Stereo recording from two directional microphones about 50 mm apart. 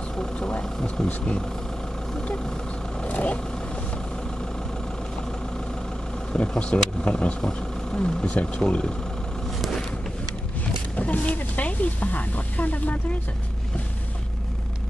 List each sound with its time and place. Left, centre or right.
0.1 s vehicle: centre
1.0 s speech: left
2.2 s vehicle: centre
6.3 s speech: left
11.0 s speech: left